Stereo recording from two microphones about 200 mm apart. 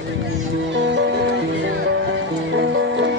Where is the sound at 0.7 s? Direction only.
65° right (ahead or behind).